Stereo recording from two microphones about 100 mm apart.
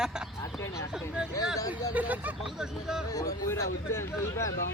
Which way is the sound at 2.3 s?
5° right (ahead or behind).